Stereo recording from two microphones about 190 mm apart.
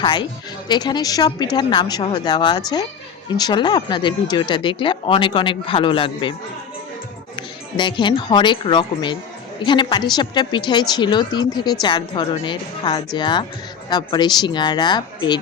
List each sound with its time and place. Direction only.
0.0 s a woman's voice: 25° left (ahead or behind)
7.8 s a woman's voice: 25° left (ahead or behind)